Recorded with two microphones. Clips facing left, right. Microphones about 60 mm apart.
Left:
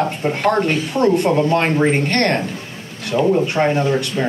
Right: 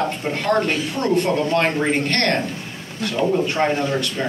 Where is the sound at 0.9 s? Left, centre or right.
Left.